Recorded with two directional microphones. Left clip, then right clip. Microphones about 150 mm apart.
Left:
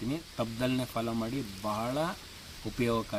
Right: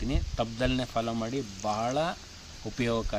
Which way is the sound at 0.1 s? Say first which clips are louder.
Right 4 dB; 15° right (ahead or behind).